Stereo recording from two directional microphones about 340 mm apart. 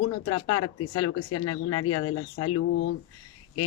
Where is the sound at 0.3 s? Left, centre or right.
Left.